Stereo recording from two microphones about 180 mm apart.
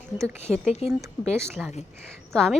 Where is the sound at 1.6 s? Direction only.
Centre (ahead or behind).